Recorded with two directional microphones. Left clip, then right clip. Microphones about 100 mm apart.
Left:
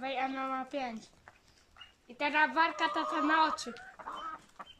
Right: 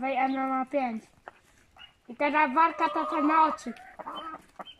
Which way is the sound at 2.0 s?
30° right (ahead or behind).